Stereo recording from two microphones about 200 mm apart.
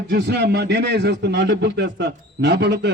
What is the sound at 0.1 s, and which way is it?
A man's voice, 55° right (ahead or behind).